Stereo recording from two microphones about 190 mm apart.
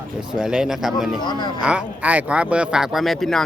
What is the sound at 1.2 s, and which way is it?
Speech, 20° left (ahead or behind).